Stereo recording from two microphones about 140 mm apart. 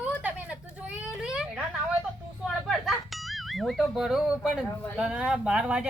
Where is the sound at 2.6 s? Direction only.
Centre (ahead or behind).